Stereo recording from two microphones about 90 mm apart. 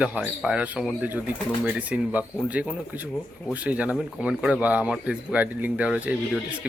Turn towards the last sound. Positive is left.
turn(degrees=-15)  # may be behind; listen again after turning